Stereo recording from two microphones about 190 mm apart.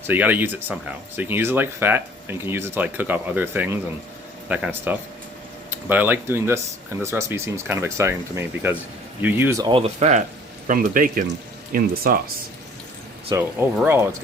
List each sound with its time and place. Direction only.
0.1 s speech: 10° right (ahead or behind); by 12.2 s 50° right (ahead or behind)
13.3 s speech: 10° right (ahead or behind)